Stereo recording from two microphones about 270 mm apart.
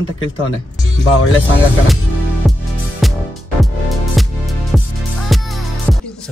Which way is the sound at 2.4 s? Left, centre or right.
Centre.